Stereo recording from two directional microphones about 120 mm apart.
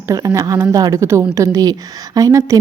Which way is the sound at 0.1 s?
25° right (ahead or behind).